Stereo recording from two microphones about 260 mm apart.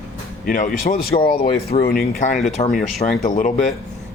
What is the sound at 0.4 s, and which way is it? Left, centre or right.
Speech, left.